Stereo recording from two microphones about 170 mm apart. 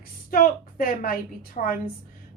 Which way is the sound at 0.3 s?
55° left (ahead or behind).